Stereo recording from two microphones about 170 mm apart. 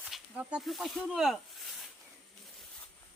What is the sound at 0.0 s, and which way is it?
Speech, 5° right (ahead or behind).